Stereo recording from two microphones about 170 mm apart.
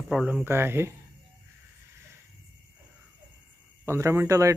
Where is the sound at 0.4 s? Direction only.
15° right (ahead or behind).